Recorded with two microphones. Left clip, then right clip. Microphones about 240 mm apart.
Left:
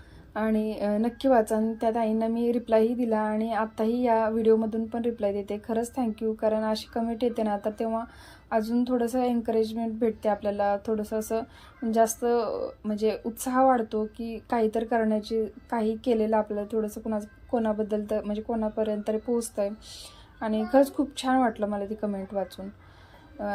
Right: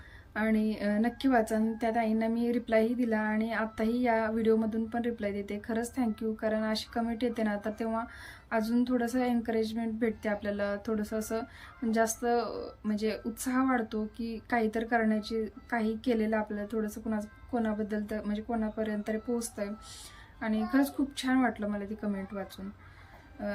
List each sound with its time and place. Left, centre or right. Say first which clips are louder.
0.3 s a woman's voice: left 3 dB; centre